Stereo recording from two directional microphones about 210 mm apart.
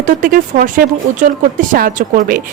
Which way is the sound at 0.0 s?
40° right (ahead or behind).